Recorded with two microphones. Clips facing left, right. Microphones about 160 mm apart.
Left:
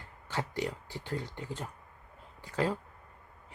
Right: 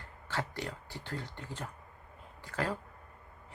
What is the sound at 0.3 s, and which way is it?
Speech, 15° left (ahead or behind).